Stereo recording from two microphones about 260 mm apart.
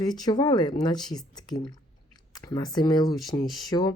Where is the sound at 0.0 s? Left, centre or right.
Centre.